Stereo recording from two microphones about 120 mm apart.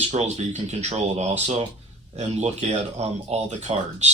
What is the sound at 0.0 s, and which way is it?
Speech, 65° right (ahead or behind).